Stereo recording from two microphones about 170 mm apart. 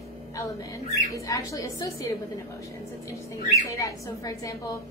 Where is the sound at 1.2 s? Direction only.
20° left (ahead or behind).